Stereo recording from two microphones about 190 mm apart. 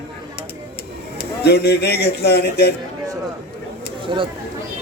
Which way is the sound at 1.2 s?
60° left (ahead or behind).